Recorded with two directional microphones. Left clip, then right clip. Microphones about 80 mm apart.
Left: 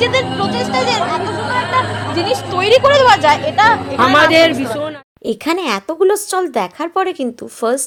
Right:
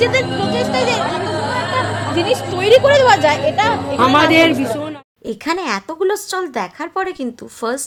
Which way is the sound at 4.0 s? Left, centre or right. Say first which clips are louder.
Left 1 dB; right.